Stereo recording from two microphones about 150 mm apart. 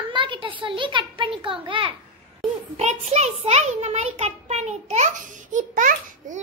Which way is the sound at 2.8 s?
45° right (ahead or behind).